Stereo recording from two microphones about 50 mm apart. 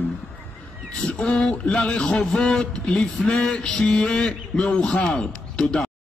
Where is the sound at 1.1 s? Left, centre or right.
Left.